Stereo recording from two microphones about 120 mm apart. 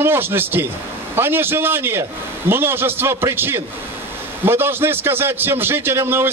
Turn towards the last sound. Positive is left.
turn(degrees=-20)  # may be behind; listen again after turning